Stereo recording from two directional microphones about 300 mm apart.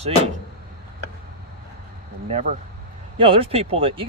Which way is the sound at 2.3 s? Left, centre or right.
Right.